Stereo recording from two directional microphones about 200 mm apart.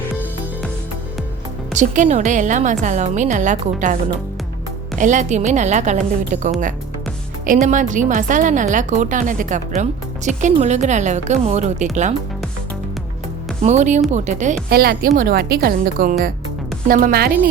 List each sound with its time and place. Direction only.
1.7 s a woman's voice: 40° right (ahead or behind)
4.9 s a woman's voice: 40° right (ahead or behind)
13.6 s a woman's voice: 35° right (ahead or behind)